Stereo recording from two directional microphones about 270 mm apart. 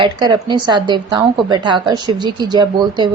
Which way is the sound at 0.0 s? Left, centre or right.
Centre.